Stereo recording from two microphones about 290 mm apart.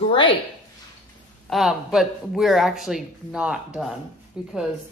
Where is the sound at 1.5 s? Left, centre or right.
Centre.